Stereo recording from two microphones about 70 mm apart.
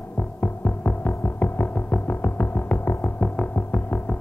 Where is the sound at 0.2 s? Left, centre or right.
Left.